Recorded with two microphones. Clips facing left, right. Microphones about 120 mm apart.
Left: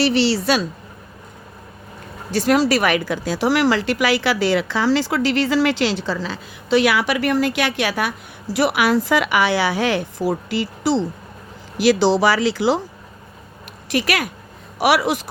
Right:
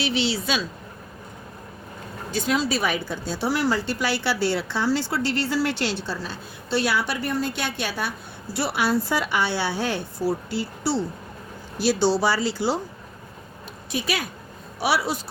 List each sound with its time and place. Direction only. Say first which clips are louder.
0.0 s a woman's voice: left 8 dB; 65° left (ahead or behind)
2.3 s a woman's voice: left 7 dB; 70° left (ahead or behind); by 12.8 s 90° left
13.9 s speech: left 6 dB; 75° left (ahead or behind)
14.8 s a woman's voice: left 6 dB; 90° left